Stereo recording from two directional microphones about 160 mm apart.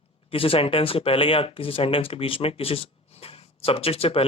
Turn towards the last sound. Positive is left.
turn(degrees=35)  # may be behind; listen again after turning